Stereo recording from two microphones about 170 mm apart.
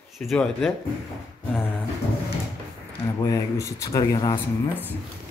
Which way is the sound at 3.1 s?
20° left (ahead or behind).